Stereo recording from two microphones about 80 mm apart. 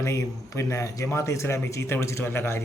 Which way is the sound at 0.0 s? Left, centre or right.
Left.